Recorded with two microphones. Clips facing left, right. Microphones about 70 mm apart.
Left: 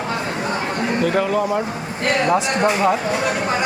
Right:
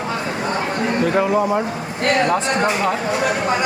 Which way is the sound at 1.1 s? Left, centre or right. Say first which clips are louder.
Right 4 dB; centre.